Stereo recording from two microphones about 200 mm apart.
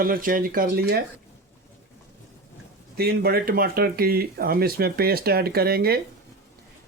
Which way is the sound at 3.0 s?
50° right (ahead or behind).